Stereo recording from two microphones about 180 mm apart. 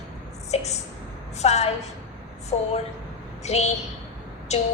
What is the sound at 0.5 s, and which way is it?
A woman's voice, 40° left (ahead or behind).